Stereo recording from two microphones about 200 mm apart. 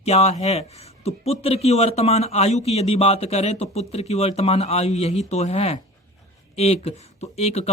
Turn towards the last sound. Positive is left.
turn(degrees=30)  # may be behind; listen again after turning